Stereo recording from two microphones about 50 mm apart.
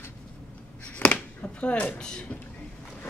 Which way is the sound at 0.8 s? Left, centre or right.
Left.